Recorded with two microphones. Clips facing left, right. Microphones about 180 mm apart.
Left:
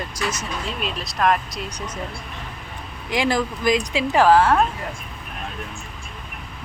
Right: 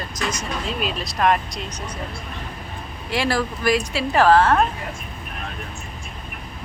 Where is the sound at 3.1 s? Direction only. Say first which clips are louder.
Left 1 dB; 15° left (ahead or behind).